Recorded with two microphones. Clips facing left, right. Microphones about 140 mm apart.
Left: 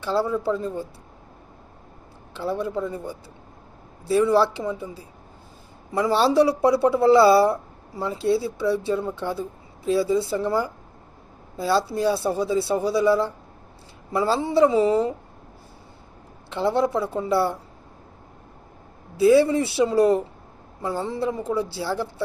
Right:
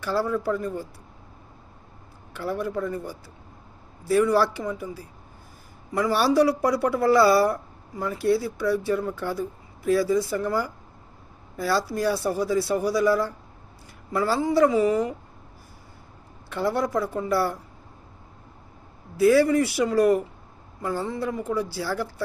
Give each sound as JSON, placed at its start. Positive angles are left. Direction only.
{"t": 0.0, "sound": "speech", "side_deg": 20}
{"t": 2.3, "sound": "speech", "side_deg": 25}
{"t": 16.5, "sound": "speech", "side_deg": 25}
{"t": 19.2, "sound": "speech", "side_deg": 20}